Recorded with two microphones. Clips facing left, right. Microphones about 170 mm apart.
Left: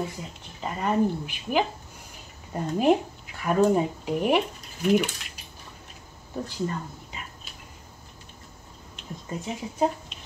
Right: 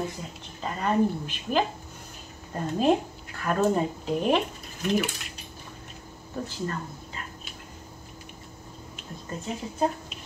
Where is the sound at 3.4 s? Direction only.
10° left (ahead or behind).